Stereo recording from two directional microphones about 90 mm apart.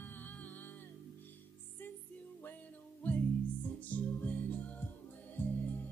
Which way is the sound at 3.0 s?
15° left (ahead or behind).